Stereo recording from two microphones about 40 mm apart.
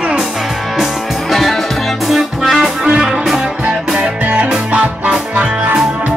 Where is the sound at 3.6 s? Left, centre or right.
Right.